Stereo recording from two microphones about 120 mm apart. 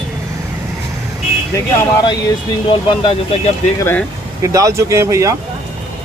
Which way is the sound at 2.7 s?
45° left (ahead or behind).